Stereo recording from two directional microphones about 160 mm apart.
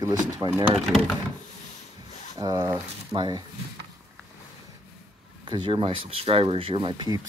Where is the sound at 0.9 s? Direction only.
Centre (ahead or behind).